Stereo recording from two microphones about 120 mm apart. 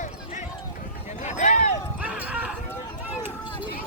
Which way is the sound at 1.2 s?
85° left.